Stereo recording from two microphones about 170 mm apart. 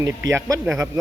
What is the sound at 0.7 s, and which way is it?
Speech, 20° right (ahead or behind).